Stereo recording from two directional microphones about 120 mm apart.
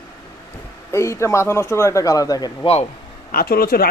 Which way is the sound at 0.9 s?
25° left (ahead or behind).